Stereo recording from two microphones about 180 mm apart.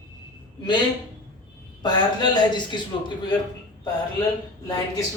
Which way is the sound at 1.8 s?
25° left (ahead or behind).